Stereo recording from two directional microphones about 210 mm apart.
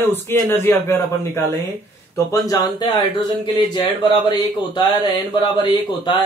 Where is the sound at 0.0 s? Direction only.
10° left (ahead or behind).